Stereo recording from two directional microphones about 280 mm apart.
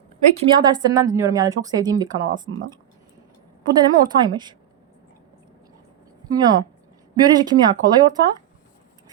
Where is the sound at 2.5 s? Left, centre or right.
Right.